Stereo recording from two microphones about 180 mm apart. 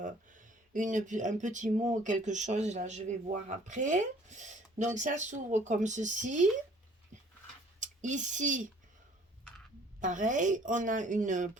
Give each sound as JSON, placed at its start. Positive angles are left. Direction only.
{"t": 0.0, "sound": "speech", "side_deg": -45}
{"t": 7.8, "sound": "speech", "side_deg": -45}
{"t": 10.0, "sound": "speech", "side_deg": -45}